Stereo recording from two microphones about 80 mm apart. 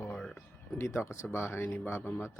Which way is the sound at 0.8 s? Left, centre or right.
Left.